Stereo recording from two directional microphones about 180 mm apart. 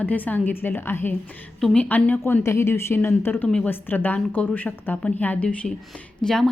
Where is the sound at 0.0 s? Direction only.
10° left (ahead or behind).